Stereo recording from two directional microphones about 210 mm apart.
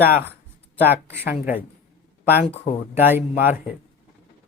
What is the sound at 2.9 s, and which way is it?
Speech, 10° right (ahead or behind).